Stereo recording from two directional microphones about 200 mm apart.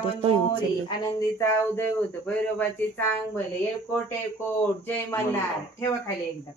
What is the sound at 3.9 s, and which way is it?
Speech, 10° left (ahead or behind).